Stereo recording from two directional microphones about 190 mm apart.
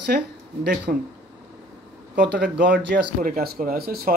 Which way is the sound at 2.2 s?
65° right (ahead or behind).